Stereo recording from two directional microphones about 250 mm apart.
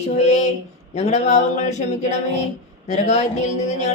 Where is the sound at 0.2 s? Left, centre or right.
Left.